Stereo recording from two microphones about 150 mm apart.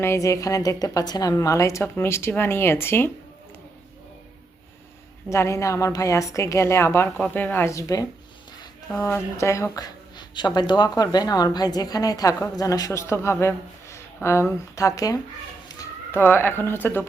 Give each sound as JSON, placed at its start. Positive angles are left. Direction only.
{"t": 0.0, "sound": "speech", "side_deg": 20}
{"t": 5.3, "sound": "speech", "side_deg": 20}